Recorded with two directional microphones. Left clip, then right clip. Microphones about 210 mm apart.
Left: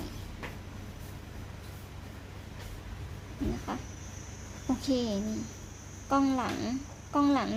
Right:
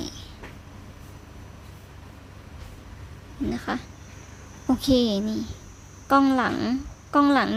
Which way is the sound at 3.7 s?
25° right (ahead or behind).